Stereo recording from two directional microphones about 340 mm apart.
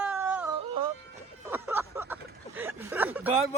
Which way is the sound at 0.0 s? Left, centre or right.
Centre.